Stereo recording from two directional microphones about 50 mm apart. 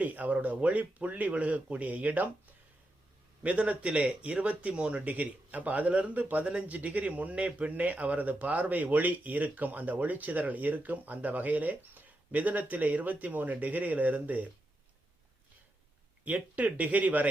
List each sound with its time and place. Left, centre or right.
0.0 s speech: right
3.4 s speech: right
16.2 s speech: right